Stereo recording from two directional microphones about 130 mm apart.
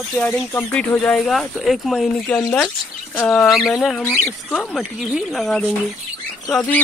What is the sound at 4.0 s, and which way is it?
Speech, 15° left (ahead or behind).